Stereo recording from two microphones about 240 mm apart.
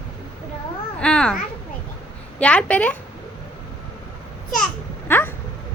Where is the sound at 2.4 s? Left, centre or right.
Centre.